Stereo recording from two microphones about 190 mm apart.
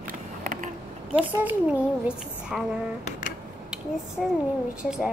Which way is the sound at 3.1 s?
40° left (ahead or behind).